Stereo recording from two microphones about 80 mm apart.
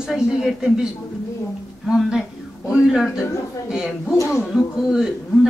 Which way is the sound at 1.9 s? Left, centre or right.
Centre.